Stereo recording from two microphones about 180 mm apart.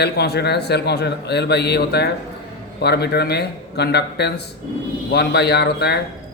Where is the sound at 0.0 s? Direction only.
65° left (ahead or behind).